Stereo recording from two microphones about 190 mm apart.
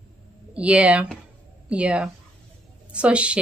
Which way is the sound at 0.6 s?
5° right (ahead or behind).